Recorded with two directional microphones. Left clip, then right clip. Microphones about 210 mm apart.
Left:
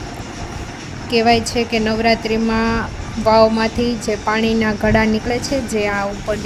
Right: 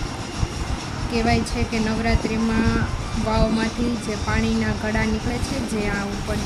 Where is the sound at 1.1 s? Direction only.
35° left (ahead or behind).